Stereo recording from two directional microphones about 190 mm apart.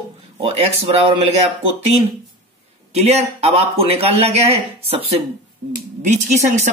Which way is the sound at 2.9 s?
35° right (ahead or behind).